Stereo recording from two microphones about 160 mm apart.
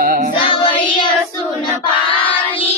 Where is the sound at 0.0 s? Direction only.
60° right (ahead or behind).